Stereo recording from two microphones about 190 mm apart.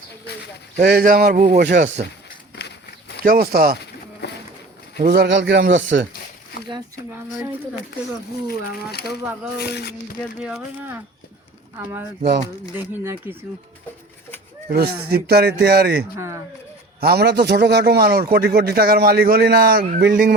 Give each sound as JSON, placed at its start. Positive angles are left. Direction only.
{"t": 0.8, "sound": "speech", "side_deg": -55}
{"t": 3.2, "sound": "speech", "side_deg": -50}
{"t": 4.2, "sound": "a sound", "side_deg": 60}
{"t": 4.9, "sound": "a man's voice", "side_deg": -55}
{"t": 8.4, "sound": "speech", "side_deg": 55}
{"t": 10.4, "sound": "speech", "side_deg": -5}
{"t": 12.7, "sound": "speech", "side_deg": -10}
{"t": 15.1, "sound": "a man's voice", "side_deg": -55}
{"t": 16.1, "sound": "speech", "side_deg": -15}
{"t": 17.0, "sound": "a man's voice", "side_deg": -55}